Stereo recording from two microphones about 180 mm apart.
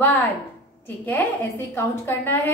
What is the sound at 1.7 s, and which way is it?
Speech, 10° left (ahead or behind).